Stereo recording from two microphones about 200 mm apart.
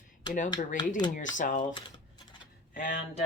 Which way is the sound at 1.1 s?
40° left (ahead or behind).